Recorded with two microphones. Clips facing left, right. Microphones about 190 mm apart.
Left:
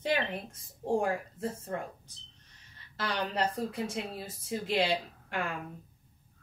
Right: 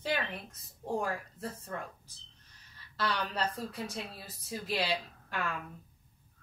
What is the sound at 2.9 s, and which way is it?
A woman's voice, 25° left (ahead or behind).